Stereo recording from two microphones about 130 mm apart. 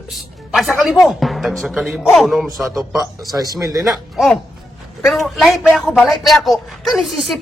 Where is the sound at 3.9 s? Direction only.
Centre (ahead or behind).